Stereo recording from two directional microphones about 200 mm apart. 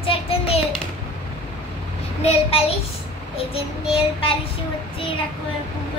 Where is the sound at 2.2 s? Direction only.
30° left (ahead or behind).